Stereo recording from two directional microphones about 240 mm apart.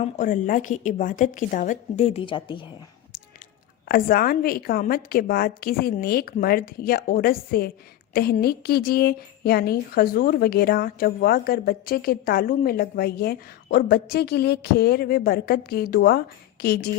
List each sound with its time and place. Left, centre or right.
0.0 s a woman's voice: left
3.8 s a woman's voice: left